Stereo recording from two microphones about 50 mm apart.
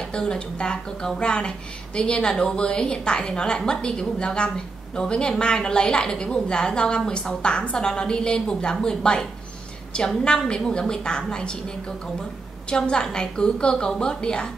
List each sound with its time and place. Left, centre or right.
0.1 s a woman's voice: centre
12.6 s a woman's voice: centre